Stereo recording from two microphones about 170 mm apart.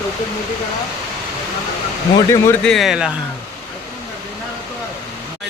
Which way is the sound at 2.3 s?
15° left (ahead or behind).